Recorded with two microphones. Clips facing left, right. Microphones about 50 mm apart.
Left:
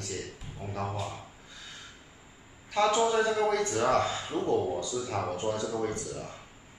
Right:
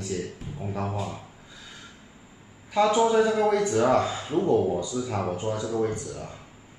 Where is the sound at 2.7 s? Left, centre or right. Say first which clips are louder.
Right 4 dB; centre.